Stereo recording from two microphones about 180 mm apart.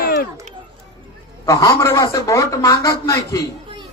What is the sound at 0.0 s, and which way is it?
Children playing, 55° left (ahead or behind).